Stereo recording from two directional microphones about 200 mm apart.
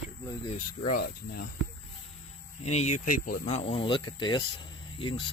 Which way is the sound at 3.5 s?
30° left (ahead or behind).